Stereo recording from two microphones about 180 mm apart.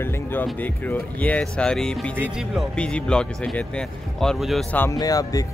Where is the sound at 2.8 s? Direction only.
5° left (ahead or behind).